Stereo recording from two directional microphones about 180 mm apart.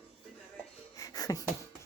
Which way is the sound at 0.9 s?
20° left (ahead or behind).